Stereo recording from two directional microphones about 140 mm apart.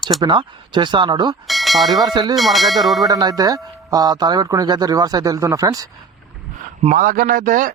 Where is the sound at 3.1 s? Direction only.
25° right (ahead or behind).